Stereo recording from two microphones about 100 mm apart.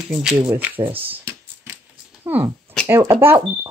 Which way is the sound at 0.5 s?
20° right (ahead or behind).